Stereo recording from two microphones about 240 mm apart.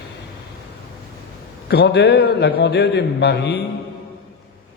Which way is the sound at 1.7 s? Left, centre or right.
Left.